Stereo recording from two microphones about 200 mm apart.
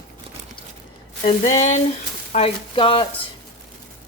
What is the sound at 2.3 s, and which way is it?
Frying, 30° left (ahead or behind).